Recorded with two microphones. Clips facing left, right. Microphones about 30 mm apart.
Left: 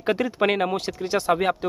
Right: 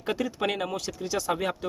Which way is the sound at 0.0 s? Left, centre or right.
Left.